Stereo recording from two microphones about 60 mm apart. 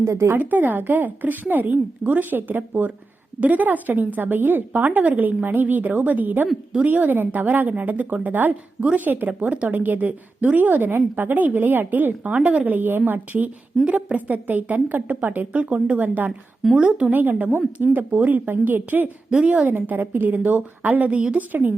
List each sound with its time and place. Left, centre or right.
0.0 s a woman's voice: right
0.3 s a woman's voice: right
16.7 s speech: centre
17.1 s a woman's voice: right
19.3 s speech: centre
19.6 s a woman's voice: right